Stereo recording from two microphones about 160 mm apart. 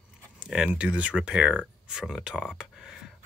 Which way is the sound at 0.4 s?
5° right (ahead or behind).